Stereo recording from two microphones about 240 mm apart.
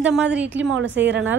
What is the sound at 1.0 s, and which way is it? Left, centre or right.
Speech, right.